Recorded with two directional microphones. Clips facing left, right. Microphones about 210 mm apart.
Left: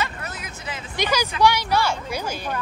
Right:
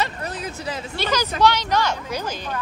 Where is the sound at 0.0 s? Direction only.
35° right (ahead or behind).